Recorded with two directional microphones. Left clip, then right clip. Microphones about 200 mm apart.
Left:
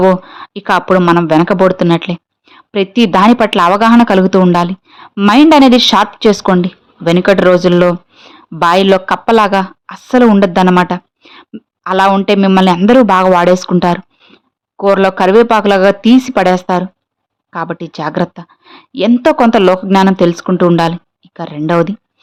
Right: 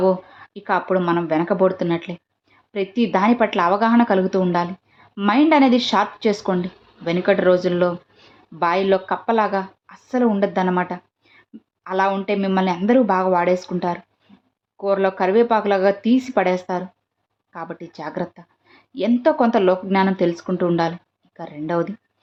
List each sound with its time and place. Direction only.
0.0 s speech: 35° left (ahead or behind)